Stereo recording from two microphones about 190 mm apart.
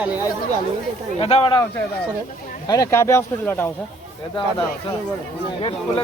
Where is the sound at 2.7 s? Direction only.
20° left (ahead or behind).